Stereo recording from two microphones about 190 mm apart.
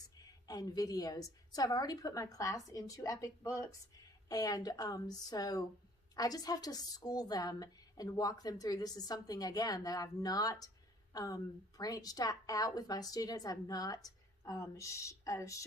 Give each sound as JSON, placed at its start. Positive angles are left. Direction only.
{"t": 0.5, "sound": "a woman's voice", "side_deg": 20}